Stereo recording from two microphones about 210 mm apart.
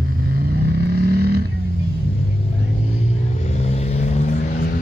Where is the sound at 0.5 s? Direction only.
50° right (ahead or behind).